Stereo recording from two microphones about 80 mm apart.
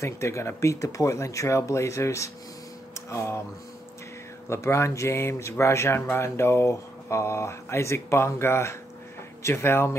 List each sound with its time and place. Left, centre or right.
0.0 s speech: left
4.5 s speech: left